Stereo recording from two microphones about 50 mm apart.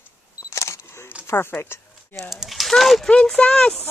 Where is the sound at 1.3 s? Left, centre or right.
Left.